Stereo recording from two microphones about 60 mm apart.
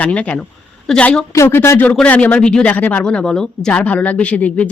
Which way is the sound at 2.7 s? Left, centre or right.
Left.